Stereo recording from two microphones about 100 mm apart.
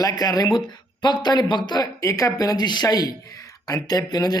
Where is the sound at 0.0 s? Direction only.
40° left (ahead or behind).